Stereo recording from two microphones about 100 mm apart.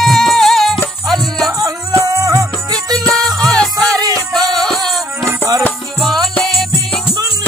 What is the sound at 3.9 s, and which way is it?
Music, 5° left (ahead or behind).